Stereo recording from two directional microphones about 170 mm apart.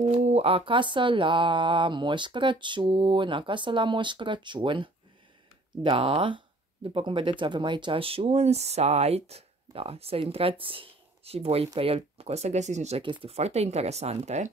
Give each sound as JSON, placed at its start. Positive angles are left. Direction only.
{"t": 0.0, "sound": "mantra", "side_deg": -40}
{"t": 5.8, "sound": "speech", "side_deg": -30}